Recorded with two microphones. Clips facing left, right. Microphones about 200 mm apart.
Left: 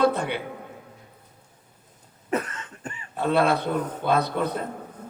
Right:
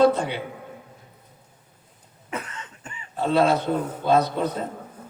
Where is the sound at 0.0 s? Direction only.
55° left (ahead or behind).